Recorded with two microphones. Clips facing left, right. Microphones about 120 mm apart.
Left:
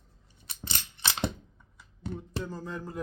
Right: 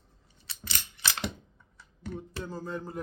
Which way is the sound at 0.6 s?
30° left (ahead or behind).